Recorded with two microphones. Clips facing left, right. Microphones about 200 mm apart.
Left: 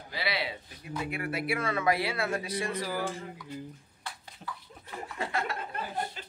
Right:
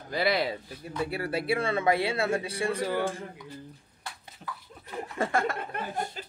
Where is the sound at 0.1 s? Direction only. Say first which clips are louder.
Right 7 dB; 45° right (ahead or behind).